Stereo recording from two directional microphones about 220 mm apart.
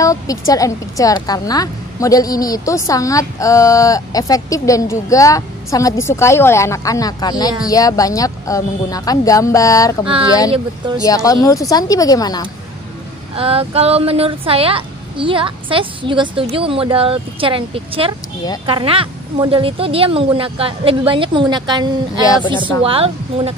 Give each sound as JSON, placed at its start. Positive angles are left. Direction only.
{"t": 0.0, "sound": "a woman's voice", "side_deg": 15}
{"t": 11.0, "sound": "a woman's voice", "side_deg": 15}
{"t": 13.4, "sound": "a woman's voice", "side_deg": -25}
{"t": 22.2, "sound": "a woman's voice", "side_deg": 15}
{"t": 22.8, "sound": "a woman's voice", "side_deg": -25}